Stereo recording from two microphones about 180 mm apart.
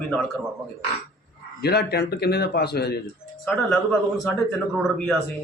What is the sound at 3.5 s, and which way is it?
Speech, centre (ahead or behind).